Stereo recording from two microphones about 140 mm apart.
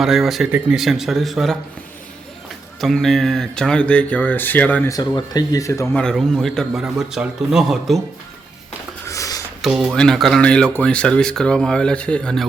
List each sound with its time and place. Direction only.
0.0 s speech: centre (ahead or behind)
2.8 s speech: centre (ahead or behind)
4.9 s speech: 25° left (ahead or behind)
6.0 s speech: 5° left (ahead or behind)
9.0 s a sound: 25° left (ahead or behind)
9.6 s speech: 5° right (ahead or behind)